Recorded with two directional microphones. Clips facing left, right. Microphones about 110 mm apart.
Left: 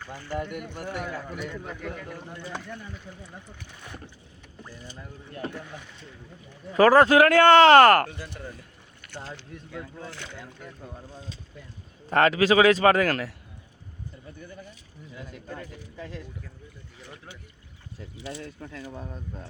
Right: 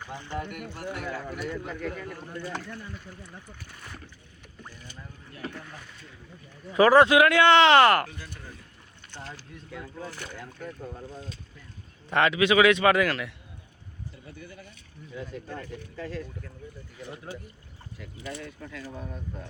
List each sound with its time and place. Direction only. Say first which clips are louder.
0.0 s speech: left 2 dB; 20° right (ahead or behind)
1.5 s speech: right 2 dB; centre (ahead or behind)
4.7 s a sound: left 4 dB; 35° left (ahead or behind)
6.7 s speech: left 1 dB; 40° left (ahead or behind)
10.1 s speech: right 1 dB; 10° right (ahead or behind)
12.0 s a man's voice: left 2 dB; 40° left (ahead or behind)
16.0 s speech: right 3 dB; 20° left (ahead or behind)
18.2 s speech: left 1 dB; 55° right (ahead or behind)